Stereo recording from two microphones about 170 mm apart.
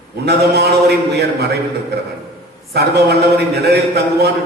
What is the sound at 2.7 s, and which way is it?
A man's voice, 75° right (ahead or behind).